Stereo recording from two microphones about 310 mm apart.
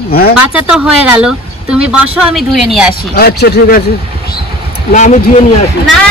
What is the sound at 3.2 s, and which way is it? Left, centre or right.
Speech, left.